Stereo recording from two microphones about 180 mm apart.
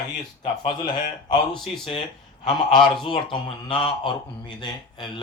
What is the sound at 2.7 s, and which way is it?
Speech, 25° left (ahead or behind).